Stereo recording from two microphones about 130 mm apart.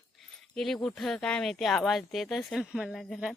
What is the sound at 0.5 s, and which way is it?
Speech, 5° left (ahead or behind).